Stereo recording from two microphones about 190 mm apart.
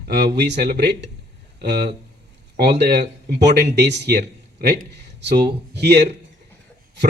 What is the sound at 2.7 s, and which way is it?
A man's voice, 60° right (ahead or behind).